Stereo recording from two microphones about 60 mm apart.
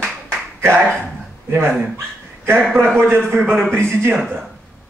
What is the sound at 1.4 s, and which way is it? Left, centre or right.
Speech, right.